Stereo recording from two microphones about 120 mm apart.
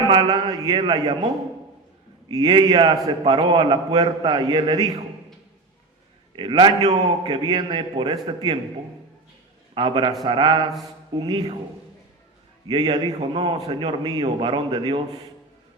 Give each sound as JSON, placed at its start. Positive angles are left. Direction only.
{"t": 0.1, "sound": "a man's voice", "side_deg": -35}
{"t": 2.3, "sound": "a man's voice", "side_deg": -35}
{"t": 6.3, "sound": "a man's voice", "side_deg": -40}
{"t": 9.7, "sound": "a man's voice", "side_deg": -35}
{"t": 12.6, "sound": "a man's voice", "side_deg": -35}